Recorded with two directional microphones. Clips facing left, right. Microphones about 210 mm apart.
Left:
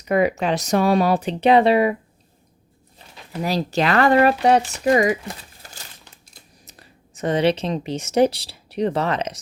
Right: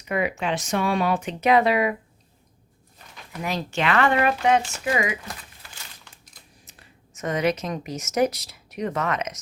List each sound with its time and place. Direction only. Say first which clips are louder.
0.1 s speech: left 6 dB; 40° left (ahead or behind)
3.4 s speech: left 5 dB; 35° left (ahead or behind)